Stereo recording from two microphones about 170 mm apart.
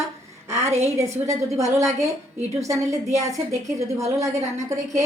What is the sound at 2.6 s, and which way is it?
A woman's voice, 20° right (ahead or behind).